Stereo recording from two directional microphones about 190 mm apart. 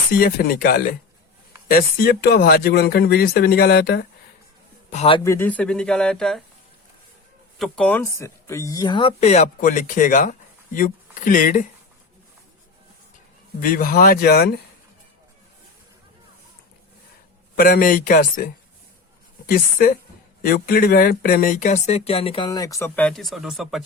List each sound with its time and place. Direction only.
0.1 s speech: 50° left (ahead or behind)
4.9 s a man's voice: 35° left (ahead or behind)
5.2 s speech: 15° left (ahead or behind)
7.6 s speech: 5° left (ahead or behind); by 11.6 s 45° left (ahead or behind)
13.6 s speech: 50° left (ahead or behind)
17.5 s speech: 50° left (ahead or behind); by 23.8 s centre (ahead or behind)